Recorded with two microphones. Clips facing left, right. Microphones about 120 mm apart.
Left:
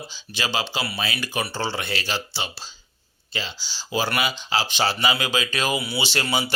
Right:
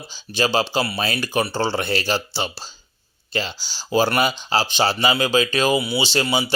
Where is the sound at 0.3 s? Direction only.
40° right (ahead or behind).